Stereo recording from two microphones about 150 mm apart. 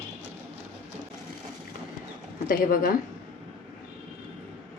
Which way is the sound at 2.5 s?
70° left (ahead or behind).